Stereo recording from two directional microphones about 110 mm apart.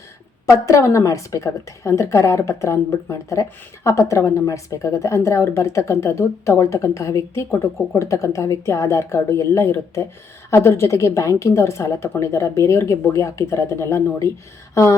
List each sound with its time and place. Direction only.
0.6 s a woman's voice: 30° left (ahead or behind)